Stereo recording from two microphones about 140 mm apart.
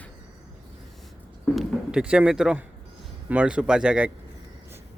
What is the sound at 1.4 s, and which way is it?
Speech, centre (ahead or behind).